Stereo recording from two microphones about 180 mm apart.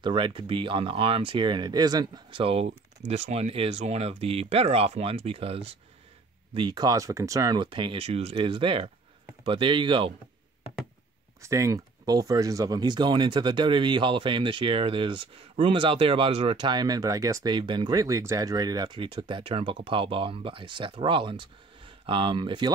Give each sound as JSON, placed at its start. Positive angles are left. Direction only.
{"t": 0.0, "sound": "speech", "side_deg": -30}
{"t": 11.4, "sound": "speech", "side_deg": -15}